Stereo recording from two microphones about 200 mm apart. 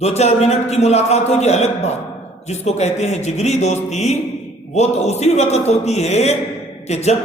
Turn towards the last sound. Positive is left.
turn(degrees=35)  # may be behind; listen again after turning